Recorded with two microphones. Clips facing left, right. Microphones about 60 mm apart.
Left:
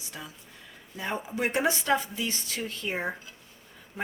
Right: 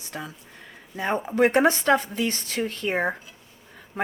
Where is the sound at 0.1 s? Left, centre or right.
Right.